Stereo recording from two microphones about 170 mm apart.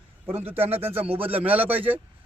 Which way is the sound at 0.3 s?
10° right (ahead or behind).